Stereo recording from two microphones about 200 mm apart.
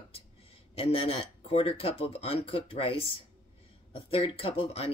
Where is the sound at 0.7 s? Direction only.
30° left (ahead or behind).